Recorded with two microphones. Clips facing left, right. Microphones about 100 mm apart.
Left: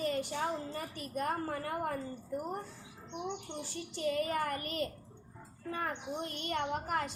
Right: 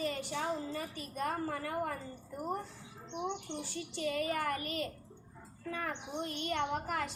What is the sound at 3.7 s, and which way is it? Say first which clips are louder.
A child's voice: left 3 dB; 40° left (ahead or behind).